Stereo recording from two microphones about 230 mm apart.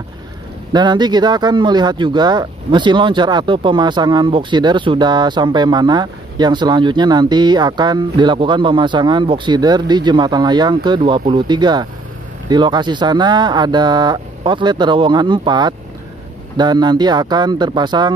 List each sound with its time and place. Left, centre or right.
0.7 s speech: centre